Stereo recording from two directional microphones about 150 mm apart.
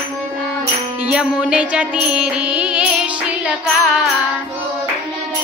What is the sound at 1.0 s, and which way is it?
Music, 10° right (ahead or behind).